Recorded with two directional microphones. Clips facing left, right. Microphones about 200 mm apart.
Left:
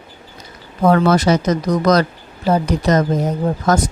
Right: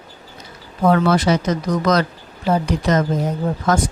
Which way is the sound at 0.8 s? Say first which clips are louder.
Left 2 dB; 45° left (ahead or behind).